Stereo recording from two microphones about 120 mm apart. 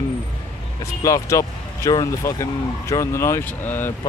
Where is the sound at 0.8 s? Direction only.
25° left (ahead or behind).